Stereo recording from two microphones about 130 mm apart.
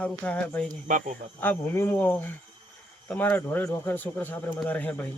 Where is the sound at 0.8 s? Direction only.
90° right.